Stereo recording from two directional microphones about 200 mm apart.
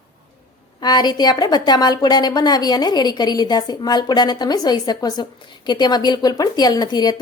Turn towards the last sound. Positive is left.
turn(degrees=20)  # may be behind; listen again after turning